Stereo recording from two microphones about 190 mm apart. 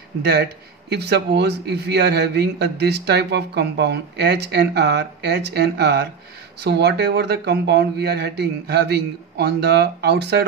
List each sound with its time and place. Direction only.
0.2 s speech: 60° right (ahead or behind)